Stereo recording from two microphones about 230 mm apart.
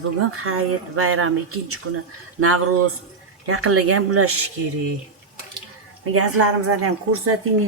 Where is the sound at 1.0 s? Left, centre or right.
Right.